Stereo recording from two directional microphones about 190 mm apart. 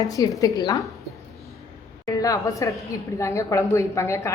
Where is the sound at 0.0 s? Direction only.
20° left (ahead or behind).